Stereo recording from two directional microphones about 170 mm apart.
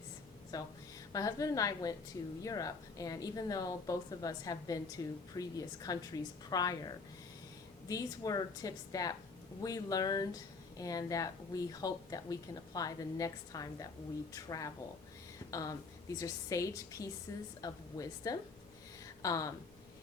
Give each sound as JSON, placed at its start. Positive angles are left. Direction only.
{"t": 0.5, "sound": "a woman's voice", "side_deg": 20}